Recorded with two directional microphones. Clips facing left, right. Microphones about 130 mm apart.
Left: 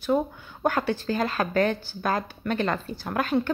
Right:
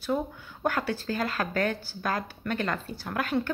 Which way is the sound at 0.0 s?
25° left (ahead or behind).